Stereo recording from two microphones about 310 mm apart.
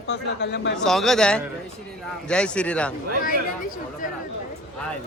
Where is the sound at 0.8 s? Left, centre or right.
Centre.